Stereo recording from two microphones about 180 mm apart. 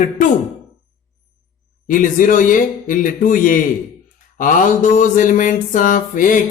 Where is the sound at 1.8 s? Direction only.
50° left (ahead or behind).